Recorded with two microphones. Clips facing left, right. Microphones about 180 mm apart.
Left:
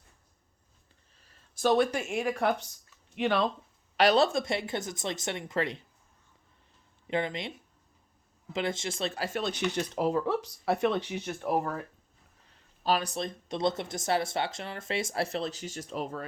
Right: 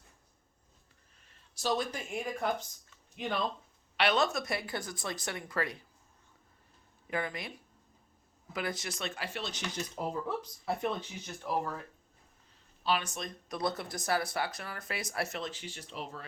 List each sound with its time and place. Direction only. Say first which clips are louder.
1.5 s speech: left 8 dB; 60° left (ahead or behind); by 3.5 s 75° left (ahead or behind)
3.9 s speech: left 6 dB; 35° left (ahead or behind)
7.1 s speech: left 5 dB; 25° left (ahead or behind); by 9.6 s 50° left (ahead or behind)
9.7 s speech: left 6 dB; 80° left; by 11.8 s 55° left (ahead or behind)
12.8 s speech: left 4 dB; 40° left (ahead or behind)